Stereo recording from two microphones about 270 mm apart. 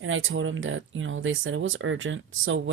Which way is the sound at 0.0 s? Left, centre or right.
Right.